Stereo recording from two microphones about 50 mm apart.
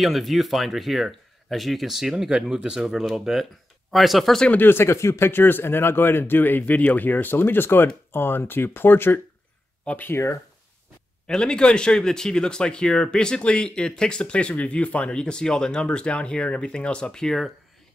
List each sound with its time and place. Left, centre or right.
0.0 s speech: centre
4.6 s speech: left
5.3 s speech: left
11.2 s speech: centre